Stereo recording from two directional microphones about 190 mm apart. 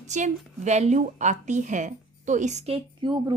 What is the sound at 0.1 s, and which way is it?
A woman's voice, 40° right (ahead or behind).